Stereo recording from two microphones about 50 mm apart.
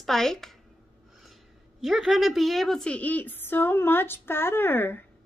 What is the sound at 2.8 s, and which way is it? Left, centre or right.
Speech, left.